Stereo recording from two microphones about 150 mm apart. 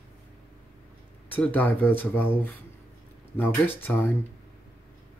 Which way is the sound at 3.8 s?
10° left (ahead or behind).